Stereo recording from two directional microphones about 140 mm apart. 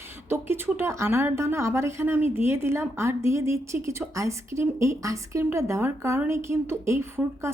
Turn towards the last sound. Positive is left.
turn(degrees=-20)  # may be behind; listen again after turning